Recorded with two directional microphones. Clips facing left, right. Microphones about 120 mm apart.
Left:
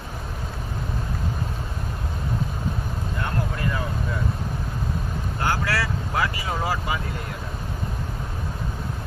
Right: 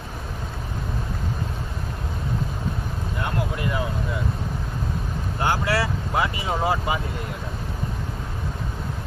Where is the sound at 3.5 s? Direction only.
15° right (ahead or behind).